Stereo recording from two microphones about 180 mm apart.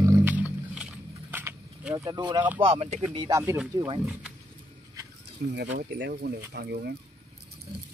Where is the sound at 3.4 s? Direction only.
15° right (ahead or behind).